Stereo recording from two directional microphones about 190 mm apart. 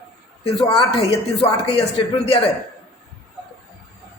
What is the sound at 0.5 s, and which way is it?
A man's voice, 25° left (ahead or behind).